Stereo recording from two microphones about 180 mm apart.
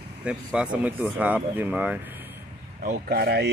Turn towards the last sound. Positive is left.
turn(degrees=-65)  # may be behind; listen again after turning